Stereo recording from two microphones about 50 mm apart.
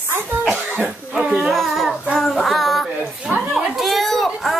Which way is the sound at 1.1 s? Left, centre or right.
Centre.